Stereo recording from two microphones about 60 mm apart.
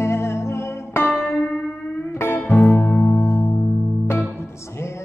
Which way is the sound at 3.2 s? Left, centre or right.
Left.